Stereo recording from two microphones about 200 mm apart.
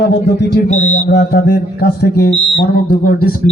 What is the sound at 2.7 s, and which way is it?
Speech, 50° left (ahead or behind).